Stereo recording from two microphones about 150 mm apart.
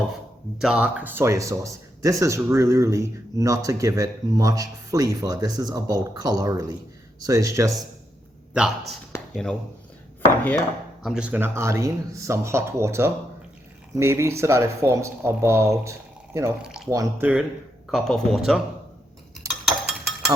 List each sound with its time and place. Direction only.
0.6 s speech: 5° right (ahead or behind)
9.3 s speech: 5° left (ahead or behind)
10.2 s chopping: 10° left (ahead or behind)
11.0 s speech: 5° right (ahead or behind)
15.8 s a sound: 20° right (ahead or behind)
16.6 s speech: 5° right (ahead or behind)
16.9 s speech: 25° right (ahead or behind)
17.9 s speech: 5° left (ahead or behind)
19.6 s a sound: 5° right (ahead or behind)